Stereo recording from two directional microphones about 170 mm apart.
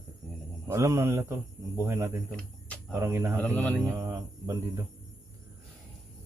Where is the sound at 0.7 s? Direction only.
20° right (ahead or behind).